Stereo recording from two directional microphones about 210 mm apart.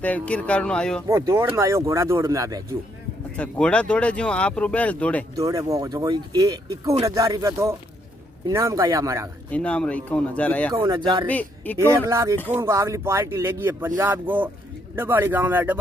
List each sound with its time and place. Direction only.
0.0 s speech: 5° left (ahead or behind)
1.0 s speech: 15° right (ahead or behind)
3.3 s speech: 5° left (ahead or behind)
5.3 s speech: 15° right (ahead or behind)
9.5 s speech: 5° left (ahead or behind)
10.7 s speech: 20° right (ahead or behind)
11.2 s speech: 10° left (ahead or behind)
11.9 s speech: 15° right (ahead or behind)